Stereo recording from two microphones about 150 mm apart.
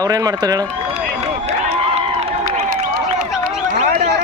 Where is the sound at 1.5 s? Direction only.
45° right (ahead or behind).